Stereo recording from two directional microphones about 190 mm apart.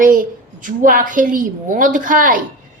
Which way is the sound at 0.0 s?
45° right (ahead or behind).